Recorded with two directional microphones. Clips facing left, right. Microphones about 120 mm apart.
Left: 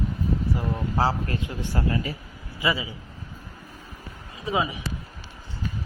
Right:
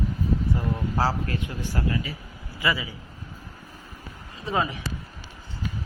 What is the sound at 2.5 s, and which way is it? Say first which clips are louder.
Speech: left 1 dB; 20° left (ahead or behind).